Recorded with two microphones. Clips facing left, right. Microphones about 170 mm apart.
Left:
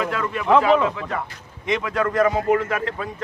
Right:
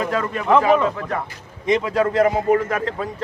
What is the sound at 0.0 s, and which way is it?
Speech, 40° right (ahead or behind).